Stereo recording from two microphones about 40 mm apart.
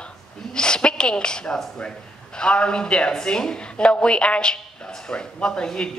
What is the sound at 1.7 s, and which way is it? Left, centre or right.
Speech, left.